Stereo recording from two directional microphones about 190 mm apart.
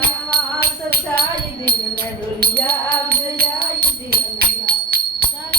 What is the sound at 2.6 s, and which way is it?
Music, 55° right (ahead or behind).